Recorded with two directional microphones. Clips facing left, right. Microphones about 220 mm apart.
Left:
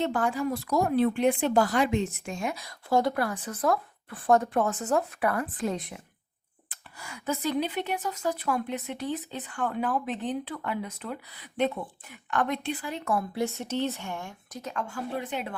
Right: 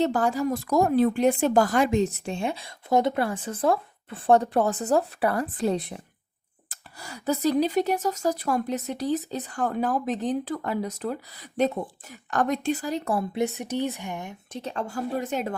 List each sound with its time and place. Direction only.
0.0 s speech: 35° right (ahead or behind)
13.3 s speech: 20° right (ahead or behind)
14.6 s speech: 35° right (ahead or behind)